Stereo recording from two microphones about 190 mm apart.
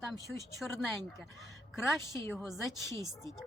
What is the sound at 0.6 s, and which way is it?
Speech, centre (ahead or behind).